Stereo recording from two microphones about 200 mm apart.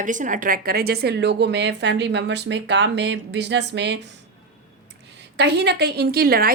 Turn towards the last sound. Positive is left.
turn(degrees=-50)  # may be behind; listen again after turning